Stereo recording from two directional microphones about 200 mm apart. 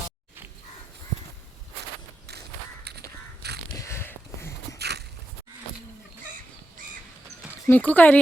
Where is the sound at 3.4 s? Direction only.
55° right (ahead or behind).